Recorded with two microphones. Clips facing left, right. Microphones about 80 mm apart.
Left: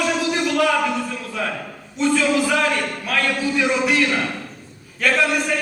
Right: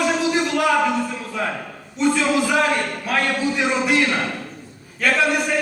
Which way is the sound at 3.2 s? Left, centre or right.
Right.